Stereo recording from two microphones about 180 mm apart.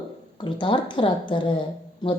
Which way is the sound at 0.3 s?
30° left (ahead or behind).